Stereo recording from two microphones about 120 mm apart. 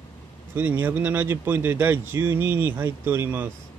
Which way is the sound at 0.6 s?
15° right (ahead or behind).